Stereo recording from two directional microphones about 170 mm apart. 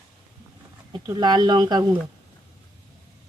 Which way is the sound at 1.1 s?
25° right (ahead or behind).